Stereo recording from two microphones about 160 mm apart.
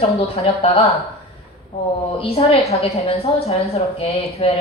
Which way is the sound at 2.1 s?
40° left (ahead or behind).